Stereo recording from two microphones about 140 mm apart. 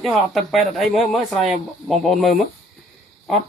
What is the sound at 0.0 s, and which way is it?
Speech, centre (ahead or behind).